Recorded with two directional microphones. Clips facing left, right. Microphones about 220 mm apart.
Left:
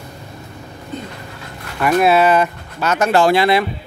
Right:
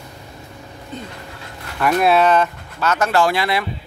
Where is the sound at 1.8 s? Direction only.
5° left (ahead or behind); by 3.6 s 25° left (ahead or behind).